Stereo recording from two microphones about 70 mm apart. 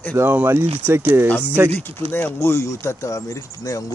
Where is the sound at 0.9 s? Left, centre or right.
Right.